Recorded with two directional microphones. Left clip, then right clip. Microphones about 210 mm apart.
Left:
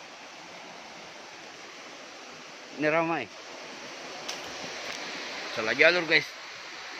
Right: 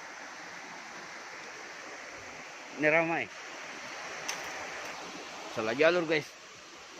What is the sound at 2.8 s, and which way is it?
Speech, 15° left (ahead or behind).